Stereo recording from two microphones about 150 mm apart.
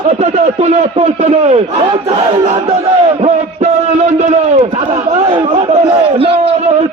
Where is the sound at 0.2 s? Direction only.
45° right (ahead or behind).